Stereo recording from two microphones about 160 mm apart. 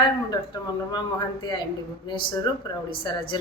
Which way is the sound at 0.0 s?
25° left (ahead or behind).